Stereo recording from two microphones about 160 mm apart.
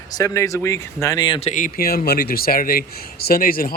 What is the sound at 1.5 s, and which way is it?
Speech, 65° left (ahead or behind).